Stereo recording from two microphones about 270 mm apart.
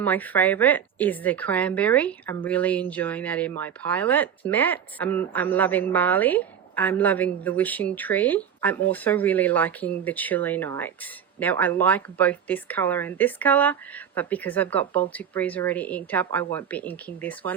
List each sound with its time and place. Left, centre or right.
0.0 s a woman's voice: centre